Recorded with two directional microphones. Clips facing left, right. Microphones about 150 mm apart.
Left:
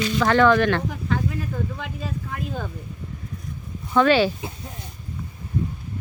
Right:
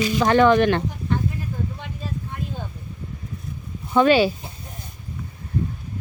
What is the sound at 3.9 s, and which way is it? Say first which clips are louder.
Speech: right 1 dB; 15° right (ahead or behind).